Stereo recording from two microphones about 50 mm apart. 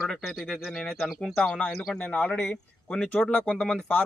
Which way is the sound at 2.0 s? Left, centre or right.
Left.